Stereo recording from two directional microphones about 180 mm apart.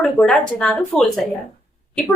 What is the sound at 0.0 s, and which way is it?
A woman's voice, 5° left (ahead or behind).